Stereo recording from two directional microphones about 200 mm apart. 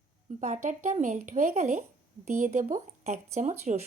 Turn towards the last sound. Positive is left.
turn(degrees=-35)  # may be behind; listen again after turning